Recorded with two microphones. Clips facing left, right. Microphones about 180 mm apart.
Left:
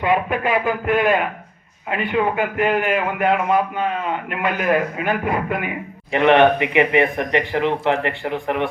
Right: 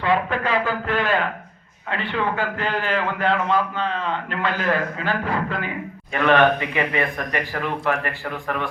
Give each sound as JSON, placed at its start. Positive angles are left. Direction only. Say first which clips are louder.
{"t": 0.0, "sound": "a man's voice", "louder": "left 2 dB", "side_deg": 15}